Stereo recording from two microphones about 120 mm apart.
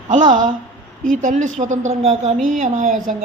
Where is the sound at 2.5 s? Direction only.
90° right.